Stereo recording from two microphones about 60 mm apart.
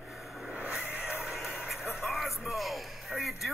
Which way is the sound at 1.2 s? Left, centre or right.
Centre.